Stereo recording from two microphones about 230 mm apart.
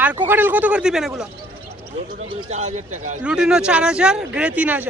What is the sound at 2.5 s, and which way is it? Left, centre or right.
Speech, right.